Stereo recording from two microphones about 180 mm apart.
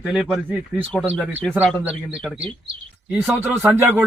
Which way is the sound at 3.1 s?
10° right (ahead or behind).